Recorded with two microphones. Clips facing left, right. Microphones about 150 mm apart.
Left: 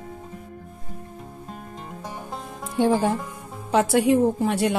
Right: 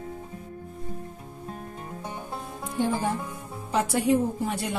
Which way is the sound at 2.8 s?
85° left.